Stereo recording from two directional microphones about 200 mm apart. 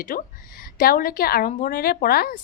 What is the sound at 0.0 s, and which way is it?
A woman's voice, 45° left (ahead or behind).